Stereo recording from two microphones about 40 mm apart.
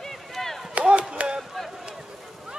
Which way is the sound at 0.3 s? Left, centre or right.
Centre.